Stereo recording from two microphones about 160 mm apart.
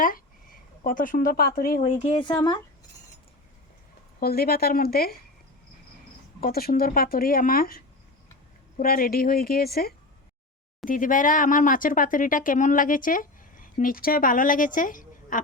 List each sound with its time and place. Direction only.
0.0 s speech: 60° left (ahead or behind)
1.8 s speech: 40° left (ahead or behind)
2.2 s speech: 25° left (ahead or behind)
4.2 s speech: 75° left (ahead or behind)
6.4 s speech: 70° left (ahead or behind)
8.8 s speech: 65° left (ahead or behind)
10.8 s speech: 60° left (ahead or behind)